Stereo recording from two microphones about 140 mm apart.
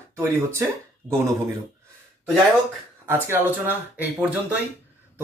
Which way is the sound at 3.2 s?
15° right (ahead or behind).